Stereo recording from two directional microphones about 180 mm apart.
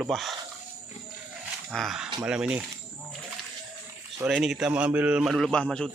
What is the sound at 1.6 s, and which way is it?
Speech, centre (ahead or behind).